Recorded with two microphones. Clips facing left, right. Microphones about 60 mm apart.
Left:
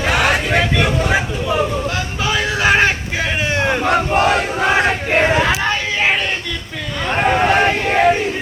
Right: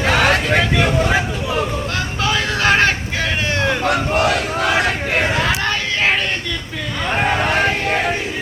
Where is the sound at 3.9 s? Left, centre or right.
Left.